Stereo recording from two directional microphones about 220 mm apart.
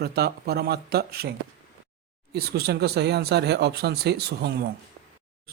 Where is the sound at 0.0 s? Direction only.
45° right (ahead or behind).